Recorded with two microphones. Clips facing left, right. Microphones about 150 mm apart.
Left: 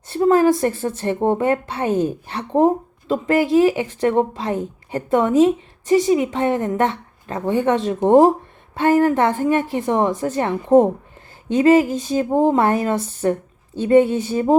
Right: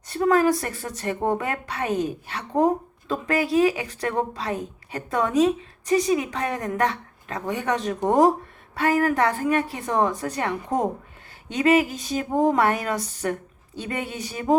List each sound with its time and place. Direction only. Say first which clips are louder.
0.1 s a woman's voice: left 5 dB; 25° left (ahead or behind)